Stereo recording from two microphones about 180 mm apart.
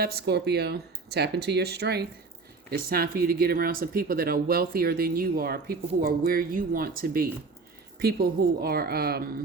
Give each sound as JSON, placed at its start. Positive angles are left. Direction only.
{"t": 0.0, "sound": "speech", "side_deg": -60}